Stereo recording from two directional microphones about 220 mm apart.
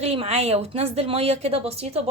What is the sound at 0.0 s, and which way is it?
A woman's voice, 25° right (ahead or behind).